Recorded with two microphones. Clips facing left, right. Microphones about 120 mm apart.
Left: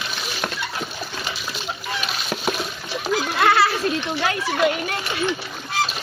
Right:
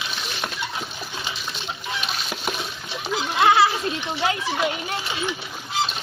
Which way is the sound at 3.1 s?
15° right (ahead or behind).